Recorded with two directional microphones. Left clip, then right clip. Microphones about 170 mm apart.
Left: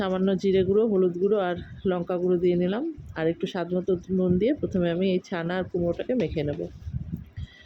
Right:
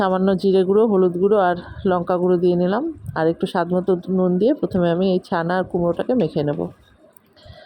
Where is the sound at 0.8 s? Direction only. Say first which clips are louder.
Right 6 dB; 25° right (ahead or behind).